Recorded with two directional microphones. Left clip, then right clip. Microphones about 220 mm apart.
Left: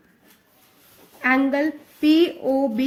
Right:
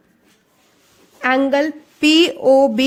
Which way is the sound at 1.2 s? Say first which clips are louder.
Right 4 dB; 45° right (ahead or behind).